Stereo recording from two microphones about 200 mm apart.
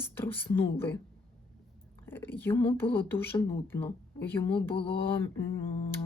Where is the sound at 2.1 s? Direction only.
10° left (ahead or behind).